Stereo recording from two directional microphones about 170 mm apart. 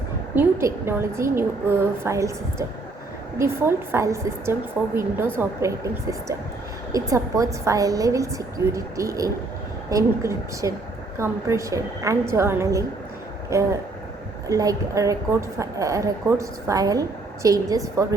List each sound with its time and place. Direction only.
0.3 s a woman's voice: 15° right (ahead or behind)